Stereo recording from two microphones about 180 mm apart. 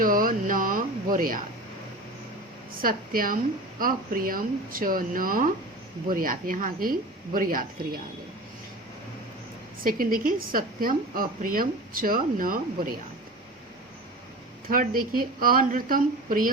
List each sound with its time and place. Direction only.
0.0 s a sound: 50° right (ahead or behind)
2.8 s a woman's voice: 50° right (ahead or behind)
9.8 s a woman's voice: 50° right (ahead or behind)
14.7 s a woman's voice: 50° right (ahead or behind)